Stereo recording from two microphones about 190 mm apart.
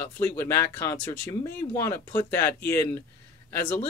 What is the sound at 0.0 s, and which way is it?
Speech, 15° left (ahead or behind).